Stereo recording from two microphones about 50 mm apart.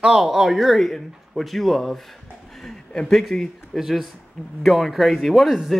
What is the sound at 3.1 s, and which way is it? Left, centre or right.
Speech, centre.